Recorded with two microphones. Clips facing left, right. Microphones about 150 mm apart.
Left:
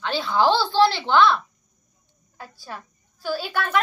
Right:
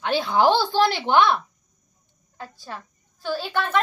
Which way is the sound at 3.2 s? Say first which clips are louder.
Even; 10° left (ahead or behind).